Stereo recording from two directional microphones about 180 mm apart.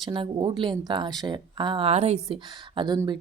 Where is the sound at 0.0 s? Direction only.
25° right (ahead or behind).